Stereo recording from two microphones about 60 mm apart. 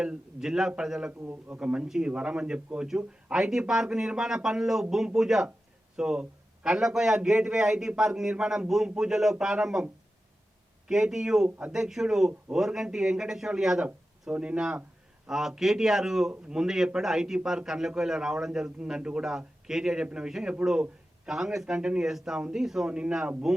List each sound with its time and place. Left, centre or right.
0.0 s a man's voice: centre
1.2 s a man's voice: right
1.5 s a man's voice: centre
10.8 s a man's voice: centre
11.4 s speech: centre
11.7 s a man's voice: centre